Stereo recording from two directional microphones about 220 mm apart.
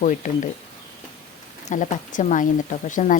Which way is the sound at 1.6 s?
35° left (ahead or behind).